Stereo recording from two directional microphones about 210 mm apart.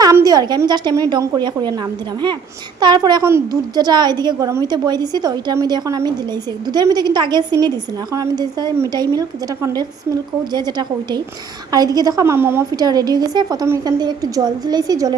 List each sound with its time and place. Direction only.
0.0 s a woman's voice: 15° right (ahead or behind)